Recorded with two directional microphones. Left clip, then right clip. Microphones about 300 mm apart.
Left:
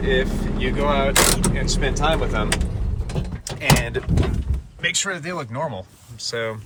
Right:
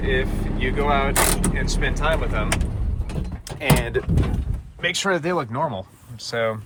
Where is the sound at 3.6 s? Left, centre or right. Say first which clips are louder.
Left 1 dB; centre.